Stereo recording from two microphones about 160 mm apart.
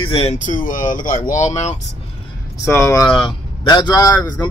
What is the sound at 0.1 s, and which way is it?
Speech, 35° left (ahead or behind).